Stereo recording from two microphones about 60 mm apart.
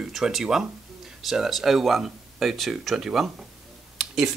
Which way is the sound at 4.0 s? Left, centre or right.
Centre.